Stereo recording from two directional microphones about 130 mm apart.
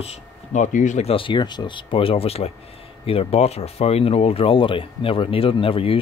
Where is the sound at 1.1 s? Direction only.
40° left (ahead or behind).